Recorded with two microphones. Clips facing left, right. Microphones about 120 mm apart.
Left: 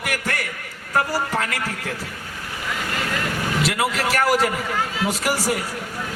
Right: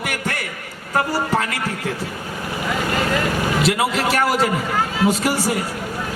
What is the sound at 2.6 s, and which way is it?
Vehicle, 35° right (ahead or behind).